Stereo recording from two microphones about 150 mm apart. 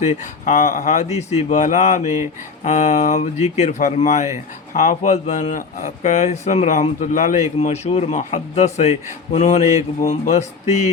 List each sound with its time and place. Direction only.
0.0 s speech: 50° left (ahead or behind)
7.6 s speech: 45° left (ahead or behind)